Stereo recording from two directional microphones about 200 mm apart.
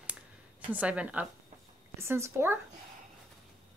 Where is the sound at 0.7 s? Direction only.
5° right (ahead or behind).